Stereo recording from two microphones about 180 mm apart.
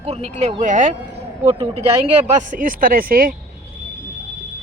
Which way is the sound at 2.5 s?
50° right (ahead or behind).